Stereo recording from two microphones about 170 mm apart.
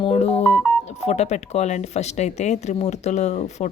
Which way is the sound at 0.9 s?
40° left (ahead or behind).